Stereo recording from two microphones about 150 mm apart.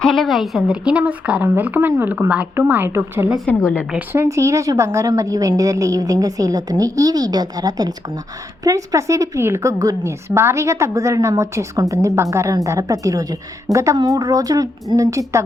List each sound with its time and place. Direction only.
0.0 s speech: centre (ahead or behind); by 3.2 s 15° right (ahead or behind)
3.5 s a woman's voice: 10° left (ahead or behind)
3.9 s a woman's voice: 15° right (ahead or behind)